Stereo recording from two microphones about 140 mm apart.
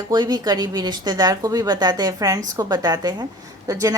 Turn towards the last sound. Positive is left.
turn(degrees=-25)  # may be behind; listen again after turning